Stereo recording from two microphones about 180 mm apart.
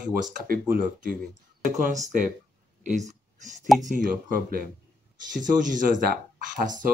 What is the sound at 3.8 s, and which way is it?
Speech, 45° right (ahead or behind).